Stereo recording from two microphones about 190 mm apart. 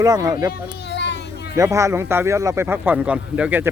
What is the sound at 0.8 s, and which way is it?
Children playing, 65° left (ahead or behind).